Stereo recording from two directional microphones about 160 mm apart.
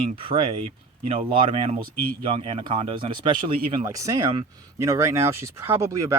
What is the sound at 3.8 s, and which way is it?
Speech, 20° right (ahead or behind).